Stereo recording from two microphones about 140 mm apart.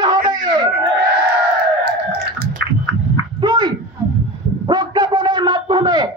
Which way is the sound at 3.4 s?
35° right (ahead or behind).